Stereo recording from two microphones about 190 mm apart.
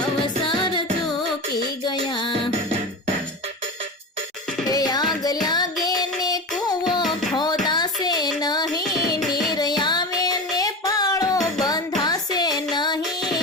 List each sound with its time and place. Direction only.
0.4 s music: 25° left (ahead or behind)
4.7 s music: 20° left (ahead or behind)
5.8 s child singing: 20° left (ahead or behind)
7.6 s music: 20° left (ahead or behind)
9.3 s child singing: 20° left (ahead or behind)
12.7 s music: 25° left (ahead or behind)